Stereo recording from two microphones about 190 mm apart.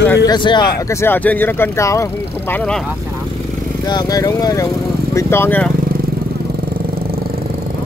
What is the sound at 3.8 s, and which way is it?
Speech, 20° left (ahead or behind).